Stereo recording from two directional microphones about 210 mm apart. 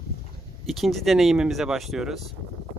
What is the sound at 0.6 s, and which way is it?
Speech, centre (ahead or behind).